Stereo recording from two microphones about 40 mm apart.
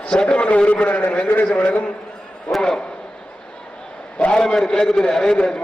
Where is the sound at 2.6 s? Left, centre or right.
Centre.